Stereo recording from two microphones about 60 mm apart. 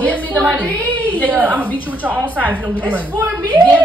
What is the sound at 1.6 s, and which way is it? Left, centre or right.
Speech, left.